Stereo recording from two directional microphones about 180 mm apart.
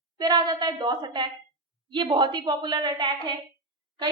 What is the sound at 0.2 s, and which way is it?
A woman's voice, 20° right (ahead or behind).